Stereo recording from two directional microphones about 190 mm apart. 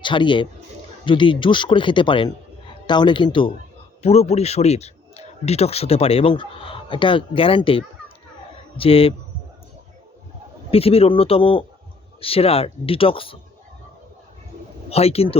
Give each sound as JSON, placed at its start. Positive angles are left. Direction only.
{"t": 0.0, "sound": "a man's voice", "side_deg": 25}
{"t": 10.7, "sound": "a man's voice", "side_deg": 30}
{"t": 14.8, "sound": "a man's voice", "side_deg": 35}